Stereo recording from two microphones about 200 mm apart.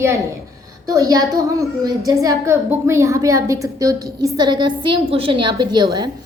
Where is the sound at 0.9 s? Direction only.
15° right (ahead or behind).